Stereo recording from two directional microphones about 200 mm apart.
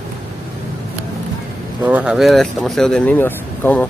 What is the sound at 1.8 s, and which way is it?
Speech, 5° right (ahead or behind).